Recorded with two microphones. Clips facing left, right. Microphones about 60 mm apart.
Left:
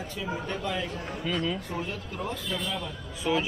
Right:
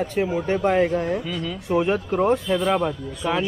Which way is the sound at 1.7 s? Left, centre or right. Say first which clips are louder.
Right 13 dB; right.